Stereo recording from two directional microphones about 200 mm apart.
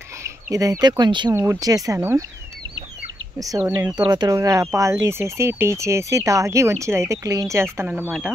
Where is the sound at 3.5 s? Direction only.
10° right (ahead or behind).